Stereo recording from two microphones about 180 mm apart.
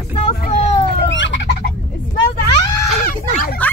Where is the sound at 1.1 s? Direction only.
90° left.